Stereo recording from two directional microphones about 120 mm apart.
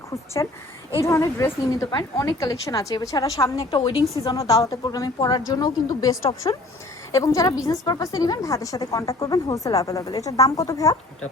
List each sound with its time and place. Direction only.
0.4 s a woman's voice: 30° left (ahead or behind)
1.9 s a woman's voice: 35° left (ahead or behind)
3.6 s a woman's voice: 45° left (ahead or behind)
4.2 s a woman's voice: 30° left (ahead or behind)